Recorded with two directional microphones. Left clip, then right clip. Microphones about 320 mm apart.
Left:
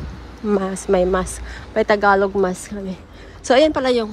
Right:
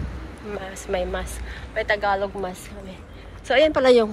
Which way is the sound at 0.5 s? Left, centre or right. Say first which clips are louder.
Left 9 dB; left.